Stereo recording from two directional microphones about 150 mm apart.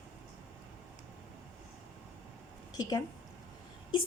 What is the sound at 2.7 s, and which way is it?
Speech, 25° left (ahead or behind).